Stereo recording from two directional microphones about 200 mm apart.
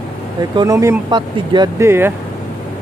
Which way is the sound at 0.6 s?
15° right (ahead or behind).